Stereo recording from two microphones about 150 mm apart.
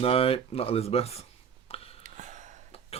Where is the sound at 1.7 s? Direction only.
40° left (ahead or behind).